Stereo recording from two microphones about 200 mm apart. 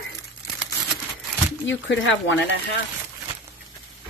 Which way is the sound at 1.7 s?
70° left (ahead or behind).